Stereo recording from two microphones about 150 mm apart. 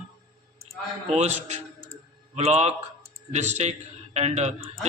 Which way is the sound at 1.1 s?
50° right (ahead or behind).